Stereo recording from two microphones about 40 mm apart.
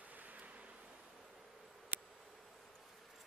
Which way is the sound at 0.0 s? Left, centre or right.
Right.